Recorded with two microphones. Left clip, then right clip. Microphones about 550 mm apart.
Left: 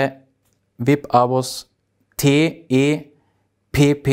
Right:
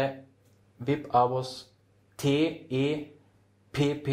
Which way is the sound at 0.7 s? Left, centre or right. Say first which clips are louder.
Left 9 dB; left.